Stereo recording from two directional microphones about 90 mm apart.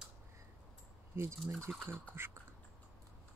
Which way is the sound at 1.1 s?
25° right (ahead or behind).